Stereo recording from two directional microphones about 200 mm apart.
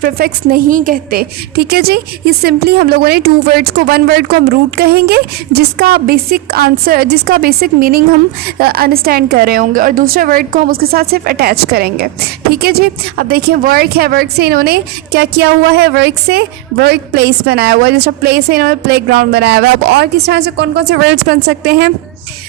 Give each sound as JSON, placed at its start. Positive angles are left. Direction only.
{"t": 0.0, "sound": "a woman's voice", "side_deg": -45}